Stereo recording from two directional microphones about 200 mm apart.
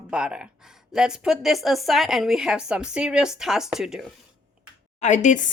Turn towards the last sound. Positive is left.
turn(degrees=40)  # may be behind; listen again after turning